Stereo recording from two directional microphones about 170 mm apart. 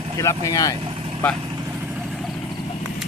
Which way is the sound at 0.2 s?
20° left (ahead or behind).